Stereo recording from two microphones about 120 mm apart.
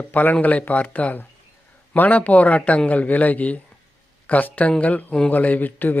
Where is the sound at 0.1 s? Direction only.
15° left (ahead or behind).